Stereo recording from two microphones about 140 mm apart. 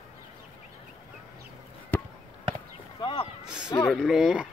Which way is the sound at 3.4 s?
5° right (ahead or behind).